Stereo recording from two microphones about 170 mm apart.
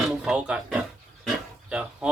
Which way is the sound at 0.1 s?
5° right (ahead or behind).